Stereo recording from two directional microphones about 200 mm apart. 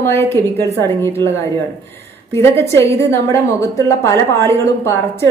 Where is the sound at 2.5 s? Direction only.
15° left (ahead or behind).